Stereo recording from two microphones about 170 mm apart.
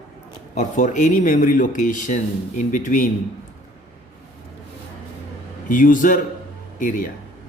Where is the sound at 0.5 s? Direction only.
45° left (ahead or behind).